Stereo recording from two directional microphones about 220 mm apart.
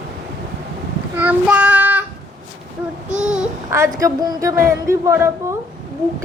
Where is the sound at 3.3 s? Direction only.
10° right (ahead or behind).